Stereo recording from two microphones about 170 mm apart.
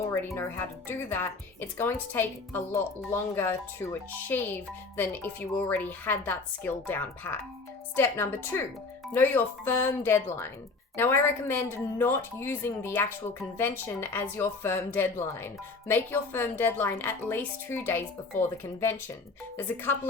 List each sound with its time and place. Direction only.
0.3 s speech: 10° left (ahead or behind)